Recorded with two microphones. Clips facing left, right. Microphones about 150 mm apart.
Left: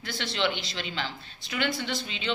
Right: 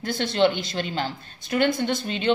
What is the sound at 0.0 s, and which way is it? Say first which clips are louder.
A man's voice: right 8 dB; 45° right (ahead or behind).